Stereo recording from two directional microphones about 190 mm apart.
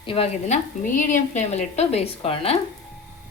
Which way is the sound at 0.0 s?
30° left (ahead or behind).